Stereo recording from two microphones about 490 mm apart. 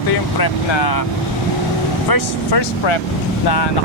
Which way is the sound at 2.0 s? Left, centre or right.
Left.